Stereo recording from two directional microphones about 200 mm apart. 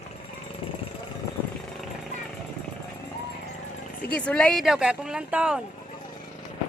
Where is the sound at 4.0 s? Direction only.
5° left (ahead or behind).